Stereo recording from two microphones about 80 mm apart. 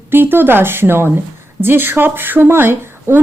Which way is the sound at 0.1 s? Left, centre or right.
Right.